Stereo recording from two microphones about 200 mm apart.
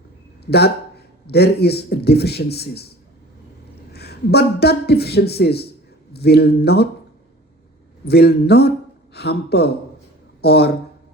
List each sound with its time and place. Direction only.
0.5 s a man's voice: 55° left (ahead or behind)
3.9 s a man's voice: 55° left (ahead or behind)
8.0 s a man's voice: 55° left (ahead or behind)